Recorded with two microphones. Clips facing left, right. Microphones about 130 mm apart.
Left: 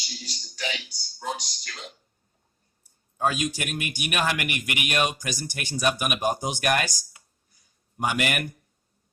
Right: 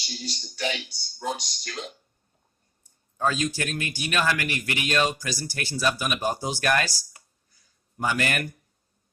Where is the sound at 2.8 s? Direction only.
15° left (ahead or behind).